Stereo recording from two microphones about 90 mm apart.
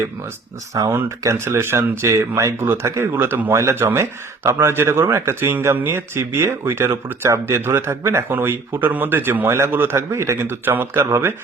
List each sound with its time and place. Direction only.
0.7 s speech: 40° right (ahead or behind)
1.2 s speech: 30° right (ahead or behind)